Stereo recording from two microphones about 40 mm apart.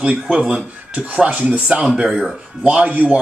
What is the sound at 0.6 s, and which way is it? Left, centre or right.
Speech, right.